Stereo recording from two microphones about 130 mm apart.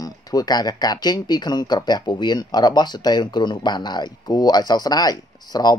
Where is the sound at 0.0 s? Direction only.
30° left (ahead or behind).